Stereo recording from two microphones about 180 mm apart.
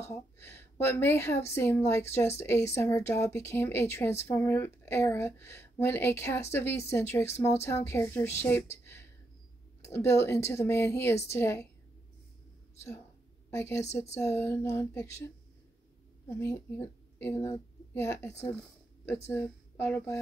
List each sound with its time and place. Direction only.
0.0 s a woman's voice: 15° left (ahead or behind)
7.3 s speech: 35° left (ahead or behind)
7.6 s a woman's voice: 15° left (ahead or behind)
9.8 s a woman's voice: 15° left (ahead or behind)
12.7 s a woman's voice: 15° left (ahead or behind)
16.3 s a woman's voice: 15° left (ahead or behind)
19.4 s speech: 10° left (ahead or behind)